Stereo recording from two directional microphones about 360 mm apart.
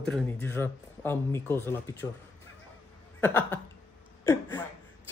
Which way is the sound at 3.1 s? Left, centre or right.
Centre.